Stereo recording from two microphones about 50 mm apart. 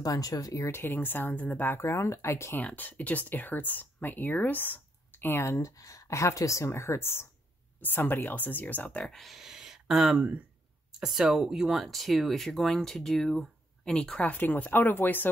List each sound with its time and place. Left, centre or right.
0.3 s speech: left
0.7 s speech: left
0.9 s speech: left
1.9 s a woman's voice: left
2.5 s speech: left
5.4 s a woman's voice: left
7.8 s speech: left
9.0 s speech: centre
9.4 s a sound: centre
10.1 s speech: right
10.9 s speech: centre
11.7 s speech: centre
14.4 s speech: left